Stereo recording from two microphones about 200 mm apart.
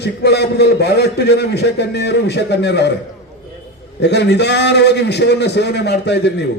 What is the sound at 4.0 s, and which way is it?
A man's voice, 60° left (ahead or behind).